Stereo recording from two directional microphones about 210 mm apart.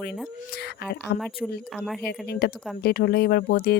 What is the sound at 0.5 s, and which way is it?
Speech, 50° left (ahead or behind).